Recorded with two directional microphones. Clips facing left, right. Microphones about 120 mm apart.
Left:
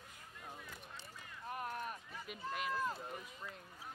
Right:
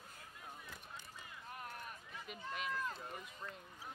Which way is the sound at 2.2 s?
Centre (ahead or behind).